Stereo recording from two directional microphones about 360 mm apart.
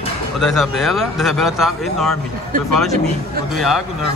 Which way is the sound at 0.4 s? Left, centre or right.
Centre.